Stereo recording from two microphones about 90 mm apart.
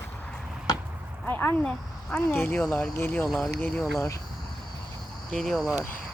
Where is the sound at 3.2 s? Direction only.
Centre (ahead or behind).